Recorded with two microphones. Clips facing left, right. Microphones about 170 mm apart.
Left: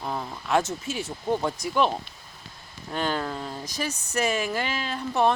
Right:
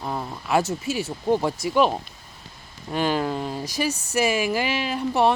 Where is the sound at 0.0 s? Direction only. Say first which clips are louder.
Right 2 dB; 5° right (ahead or behind).